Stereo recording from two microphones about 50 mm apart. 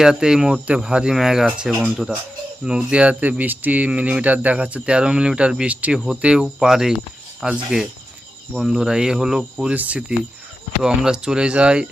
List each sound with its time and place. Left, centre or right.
0.0 s speech: centre
6.6 s speech: centre
9.7 s speech: right
10.8 s speech: centre